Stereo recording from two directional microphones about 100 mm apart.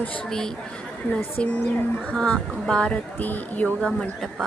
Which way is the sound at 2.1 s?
5° left (ahead or behind).